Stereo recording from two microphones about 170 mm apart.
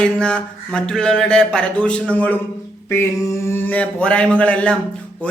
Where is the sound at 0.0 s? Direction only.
5° left (ahead or behind).